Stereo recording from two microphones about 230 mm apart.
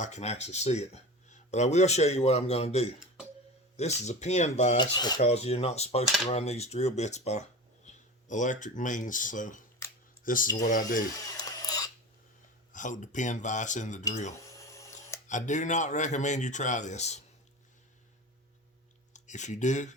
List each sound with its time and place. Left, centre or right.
0.0 s speech: left
4.9 s speech: centre; by 11.0 s left
11.3 s a sound: centre
12.7 s speech: left
14.4 s a sound: centre
15.3 s speech: left
19.1 s speech: left